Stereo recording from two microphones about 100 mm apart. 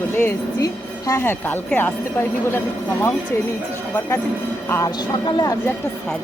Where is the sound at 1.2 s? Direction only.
20° left (ahead or behind).